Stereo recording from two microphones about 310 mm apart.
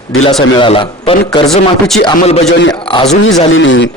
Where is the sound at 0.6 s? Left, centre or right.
Centre.